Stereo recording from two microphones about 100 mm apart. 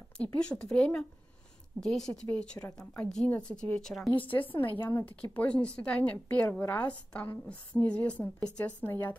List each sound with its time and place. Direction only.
0.2 s a woman's voice: 10° left (ahead or behind)
4.2 s a woman's voice: 60° left (ahead or behind)
4.5 s a woman's voice: 20° left (ahead or behind)